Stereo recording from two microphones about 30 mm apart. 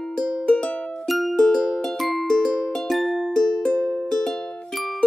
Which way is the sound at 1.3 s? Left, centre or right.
Centre.